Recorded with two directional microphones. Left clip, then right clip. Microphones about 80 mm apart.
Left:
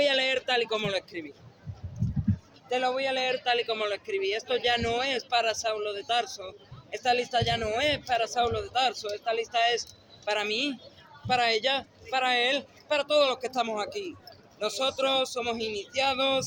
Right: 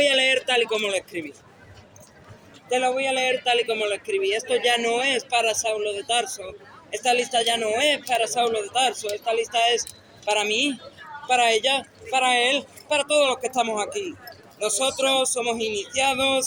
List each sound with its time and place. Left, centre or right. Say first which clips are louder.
0.0 s speech: right 6 dB; right
2.6 s speech: right 5 dB; right